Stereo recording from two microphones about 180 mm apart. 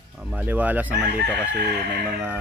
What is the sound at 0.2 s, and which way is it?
Speech, 5° right (ahead or behind).